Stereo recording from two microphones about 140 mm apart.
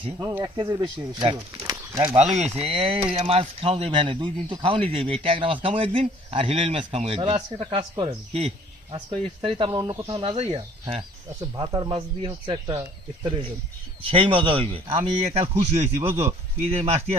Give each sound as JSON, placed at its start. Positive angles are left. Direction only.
{"t": 0.2, "sound": "speech", "side_deg": -20}
{"t": 0.5, "sound": "speech", "side_deg": -35}
{"t": 2.0, "sound": "speech", "side_deg": -60}
{"t": 11.5, "sound": "speech", "side_deg": -30}
{"t": 16.0, "sound": "speech", "side_deg": -20}
{"t": 16.2, "sound": "speech", "side_deg": -50}